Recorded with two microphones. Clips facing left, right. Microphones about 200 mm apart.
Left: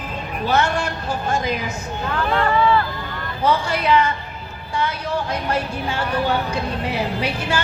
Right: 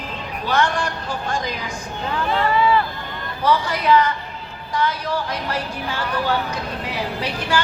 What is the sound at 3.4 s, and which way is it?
Speech, 25° left (ahead or behind).